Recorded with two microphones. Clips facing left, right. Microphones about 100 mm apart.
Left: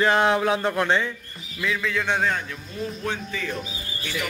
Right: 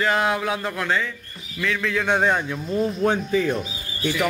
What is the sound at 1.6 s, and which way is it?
Speech, 5° left (ahead or behind).